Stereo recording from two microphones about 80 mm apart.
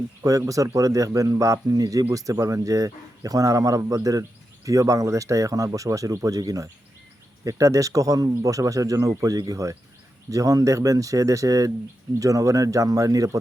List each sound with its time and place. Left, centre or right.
0.2 s speech: right